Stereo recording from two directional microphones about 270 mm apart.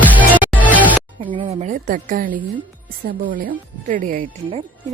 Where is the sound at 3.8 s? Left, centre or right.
Right.